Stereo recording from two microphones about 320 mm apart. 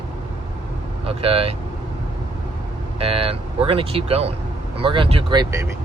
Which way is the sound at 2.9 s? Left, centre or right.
Centre.